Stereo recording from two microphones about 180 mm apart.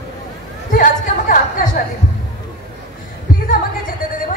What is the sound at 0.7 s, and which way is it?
A woman's voice, 50° left (ahead or behind).